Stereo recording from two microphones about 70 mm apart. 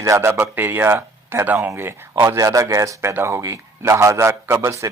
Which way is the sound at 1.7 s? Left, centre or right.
Right.